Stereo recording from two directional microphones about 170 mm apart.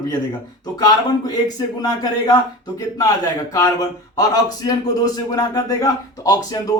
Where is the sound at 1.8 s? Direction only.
20° left (ahead or behind).